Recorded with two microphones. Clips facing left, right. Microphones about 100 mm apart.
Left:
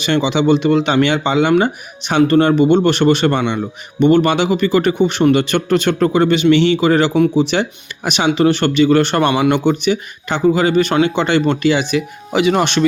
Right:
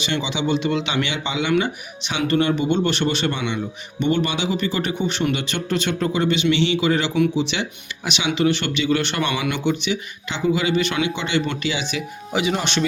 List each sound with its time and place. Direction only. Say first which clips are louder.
0.0 s speech: left 9 dB; 50° left (ahead or behind)